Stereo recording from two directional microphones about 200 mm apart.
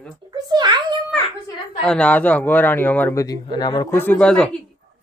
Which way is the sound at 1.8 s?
5° left (ahead or behind).